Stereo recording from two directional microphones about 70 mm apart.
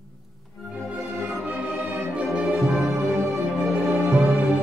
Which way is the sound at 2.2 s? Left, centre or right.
Right.